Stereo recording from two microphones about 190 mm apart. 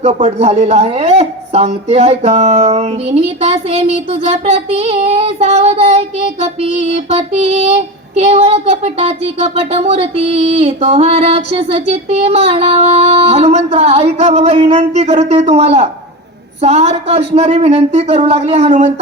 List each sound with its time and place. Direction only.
0.0 s speech: 35° right (ahead or behind)